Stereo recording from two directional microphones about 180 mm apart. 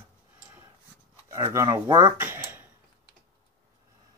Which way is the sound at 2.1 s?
10° right (ahead or behind).